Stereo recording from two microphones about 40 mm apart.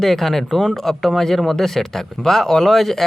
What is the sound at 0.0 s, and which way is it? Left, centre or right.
Speech, centre.